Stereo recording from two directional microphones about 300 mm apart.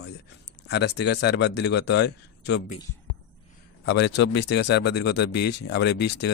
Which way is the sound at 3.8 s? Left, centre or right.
Left.